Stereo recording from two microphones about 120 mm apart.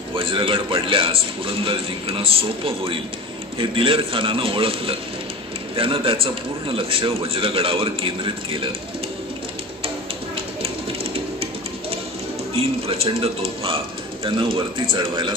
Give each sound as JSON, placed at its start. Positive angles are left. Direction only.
{"t": 0.1, "sound": "a man's voice", "side_deg": -45}
{"t": 10.3, "sound": "a sound", "side_deg": -50}
{"t": 12.5, "sound": "a man's voice", "side_deg": -55}